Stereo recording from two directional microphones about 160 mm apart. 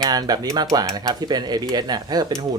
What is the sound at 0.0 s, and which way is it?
Speech, 25° right (ahead or behind).